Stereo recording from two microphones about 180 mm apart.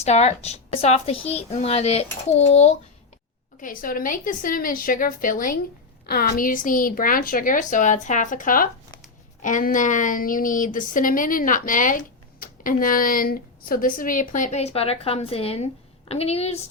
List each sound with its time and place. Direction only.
0.0 s a child's voice: 35° left (ahead or behind)
3.6 s a woman's voice: 50° left (ahead or behind)